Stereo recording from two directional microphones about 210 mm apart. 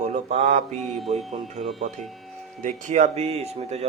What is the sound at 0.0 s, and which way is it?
Mantra, 30° right (ahead or behind).